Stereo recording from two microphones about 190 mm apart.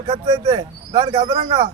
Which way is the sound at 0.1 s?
20° right (ahead or behind).